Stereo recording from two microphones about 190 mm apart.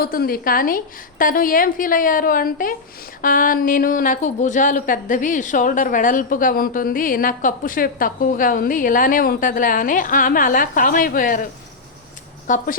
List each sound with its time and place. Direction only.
0.0 s a woman's voice: 50° left (ahead or behind)
12.5 s a woman's voice: 45° left (ahead or behind)